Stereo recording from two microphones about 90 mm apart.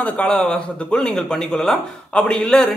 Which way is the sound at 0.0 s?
15° left (ahead or behind).